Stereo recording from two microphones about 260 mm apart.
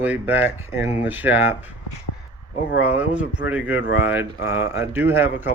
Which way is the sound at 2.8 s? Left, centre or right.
Centre.